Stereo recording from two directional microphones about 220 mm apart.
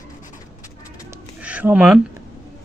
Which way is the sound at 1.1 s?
5° right (ahead or behind).